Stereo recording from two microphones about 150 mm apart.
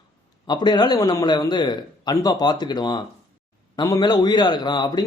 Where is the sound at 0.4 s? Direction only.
30° left (ahead or behind).